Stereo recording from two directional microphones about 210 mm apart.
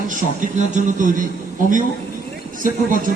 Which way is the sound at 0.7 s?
35° right (ahead or behind).